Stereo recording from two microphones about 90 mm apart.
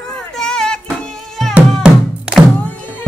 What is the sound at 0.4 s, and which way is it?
Music, 5° left (ahead or behind).